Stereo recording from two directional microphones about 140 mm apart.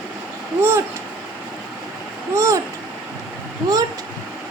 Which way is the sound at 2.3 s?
20° right (ahead or behind).